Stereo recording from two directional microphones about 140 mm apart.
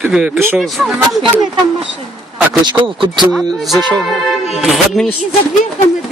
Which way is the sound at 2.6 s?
35° right (ahead or behind).